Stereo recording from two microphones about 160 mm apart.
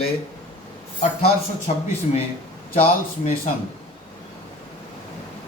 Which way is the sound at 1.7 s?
45° left (ahead or behind).